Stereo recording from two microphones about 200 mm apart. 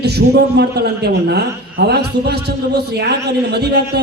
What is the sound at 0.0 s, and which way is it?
A man's voice, 55° right (ahead or behind).